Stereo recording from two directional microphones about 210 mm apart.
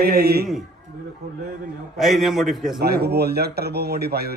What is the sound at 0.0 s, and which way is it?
Speech, 50° right (ahead or behind).